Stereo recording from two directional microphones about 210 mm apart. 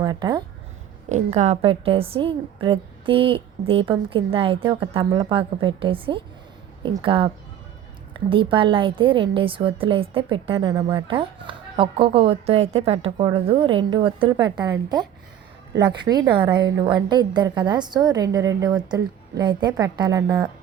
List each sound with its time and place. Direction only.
0.0 s a woman's voice: 20° right (ahead or behind)
1.1 s a woman's voice: 30° right (ahead or behind)
8.3 s a woman's voice: 25° right (ahead or behind)